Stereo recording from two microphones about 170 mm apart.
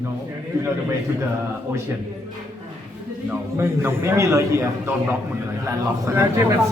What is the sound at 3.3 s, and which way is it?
A man's voice, 15° right (ahead or behind).